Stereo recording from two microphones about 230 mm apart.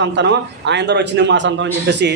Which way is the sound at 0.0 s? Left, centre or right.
Right.